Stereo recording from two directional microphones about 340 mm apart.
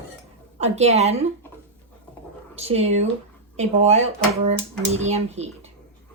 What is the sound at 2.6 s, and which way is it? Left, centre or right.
Speech, centre.